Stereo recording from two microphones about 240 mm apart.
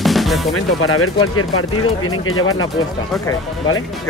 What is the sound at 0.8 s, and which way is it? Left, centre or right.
Speech, left.